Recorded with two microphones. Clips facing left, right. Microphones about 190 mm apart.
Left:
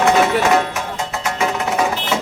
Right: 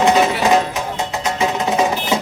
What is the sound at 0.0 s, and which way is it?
Music, 20° right (ahead or behind).